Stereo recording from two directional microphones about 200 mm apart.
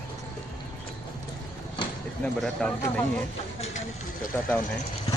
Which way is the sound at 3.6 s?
35° left (ahead or behind).